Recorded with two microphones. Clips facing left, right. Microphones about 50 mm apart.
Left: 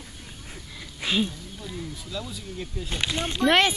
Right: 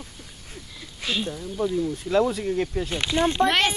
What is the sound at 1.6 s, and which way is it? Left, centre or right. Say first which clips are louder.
Speech: right 13 dB; right.